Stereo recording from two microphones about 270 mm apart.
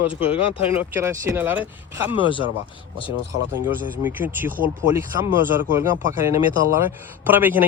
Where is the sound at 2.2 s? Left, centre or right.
Centre.